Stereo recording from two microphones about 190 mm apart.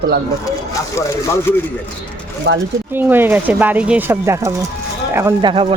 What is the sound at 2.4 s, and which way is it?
Speech, 65° right (ahead or behind).